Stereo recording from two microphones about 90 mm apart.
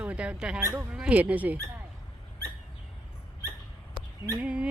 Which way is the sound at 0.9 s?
15° right (ahead or behind).